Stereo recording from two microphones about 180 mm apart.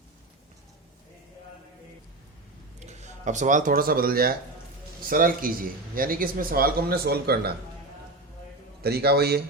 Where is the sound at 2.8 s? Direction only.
40° right (ahead or behind); by 7.4 s 60° right (ahead or behind).